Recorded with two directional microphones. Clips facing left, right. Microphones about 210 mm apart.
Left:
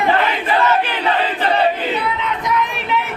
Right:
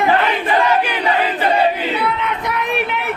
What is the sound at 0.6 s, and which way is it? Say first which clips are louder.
Battle cry: left 2 dB; 15° right (ahead or behind).